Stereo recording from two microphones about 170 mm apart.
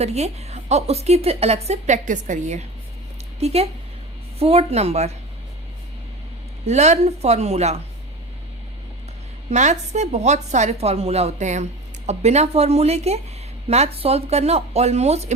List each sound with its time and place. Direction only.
0.0 s a woman's voice: 40° right (ahead or behind)
6.7 s a woman's voice: 40° right (ahead or behind)
9.5 s a woman's voice: 45° right (ahead or behind)